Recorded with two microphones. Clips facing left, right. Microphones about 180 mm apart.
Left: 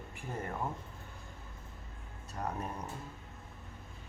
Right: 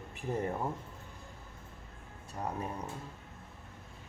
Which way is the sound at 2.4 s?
10° right (ahead or behind).